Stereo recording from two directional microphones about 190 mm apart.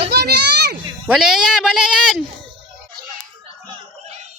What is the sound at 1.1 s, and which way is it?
Speech, 5° right (ahead or behind).